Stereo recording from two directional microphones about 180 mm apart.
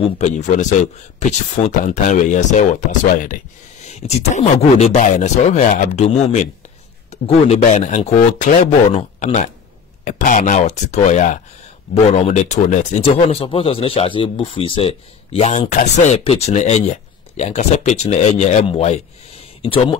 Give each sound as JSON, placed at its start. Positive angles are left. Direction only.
{"t": 0.0, "sound": "speech", "side_deg": 40}
{"t": 3.8, "sound": "speech", "side_deg": 40}